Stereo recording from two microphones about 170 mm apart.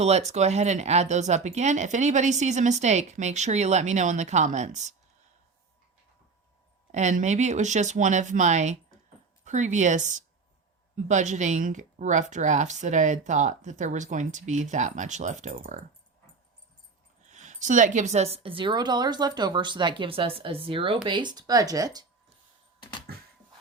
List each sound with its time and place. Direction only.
0.0 s speech: 40° right (ahead or behind)
6.9 s speech: 45° right (ahead or behind)
17.3 s a woman's voice: 45° right (ahead or behind); by 22.0 s 20° right (ahead or behind)
22.8 s a sound: 30° left (ahead or behind)